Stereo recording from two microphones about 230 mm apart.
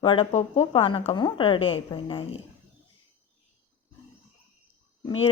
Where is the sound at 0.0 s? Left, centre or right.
Left.